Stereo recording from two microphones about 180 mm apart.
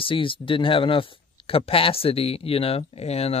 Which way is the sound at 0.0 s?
30° left (ahead or behind).